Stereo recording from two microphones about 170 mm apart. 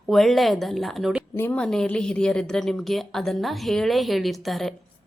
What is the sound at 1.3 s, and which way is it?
A woman's voice, 10° left (ahead or behind).